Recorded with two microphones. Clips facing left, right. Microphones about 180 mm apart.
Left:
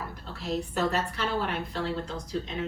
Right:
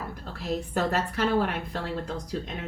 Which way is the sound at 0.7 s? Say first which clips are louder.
Right 2 dB; 50° right (ahead or behind).